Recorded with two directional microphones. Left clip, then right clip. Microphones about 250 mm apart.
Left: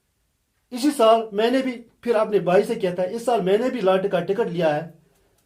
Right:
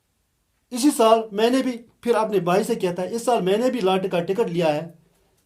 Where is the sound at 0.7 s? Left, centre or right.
Right.